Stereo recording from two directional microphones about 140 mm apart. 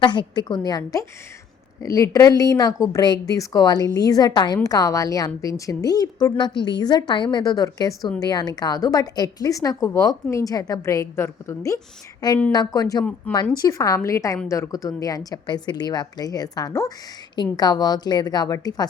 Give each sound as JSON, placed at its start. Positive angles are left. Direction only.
{"t": 0.0, "sound": "a woman's voice", "side_deg": 35}